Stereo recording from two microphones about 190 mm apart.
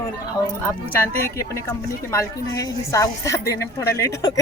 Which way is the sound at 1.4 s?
15° left (ahead or behind).